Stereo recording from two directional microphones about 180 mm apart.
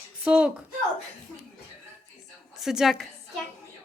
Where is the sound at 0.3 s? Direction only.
5° right (ahead or behind).